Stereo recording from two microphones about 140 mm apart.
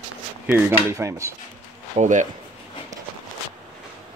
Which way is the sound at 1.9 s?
60° right (ahead or behind).